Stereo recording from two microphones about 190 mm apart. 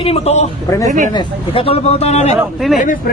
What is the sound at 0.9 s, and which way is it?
Speech, 40° right (ahead or behind).